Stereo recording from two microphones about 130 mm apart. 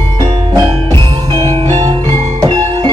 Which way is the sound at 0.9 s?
40° right (ahead or behind).